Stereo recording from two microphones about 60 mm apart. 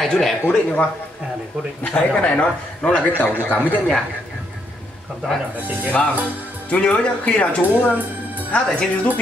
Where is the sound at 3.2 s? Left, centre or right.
Left.